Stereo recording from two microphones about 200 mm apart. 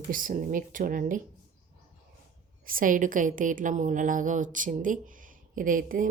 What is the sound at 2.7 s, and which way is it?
A woman's voice, 45° right (ahead or behind).